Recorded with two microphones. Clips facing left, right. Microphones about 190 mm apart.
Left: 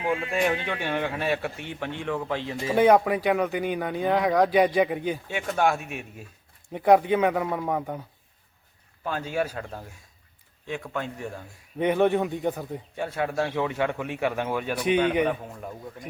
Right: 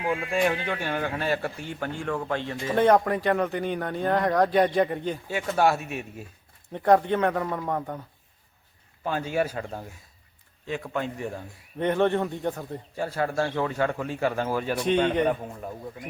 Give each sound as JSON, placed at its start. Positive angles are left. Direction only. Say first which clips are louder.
{"t": 0.7, "sound": "a man's voice", "louder": "even", "side_deg": 0}
{"t": 9.3, "sound": "speech", "louder": "right 1 dB", "side_deg": -10}
{"t": 11.8, "sound": "a man's voice", "louder": "left 1 dB", "side_deg": 10}